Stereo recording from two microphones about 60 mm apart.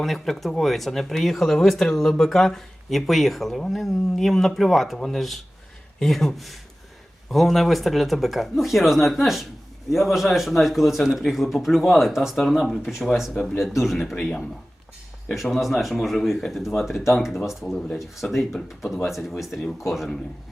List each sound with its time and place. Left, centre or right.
0.0 s speech: centre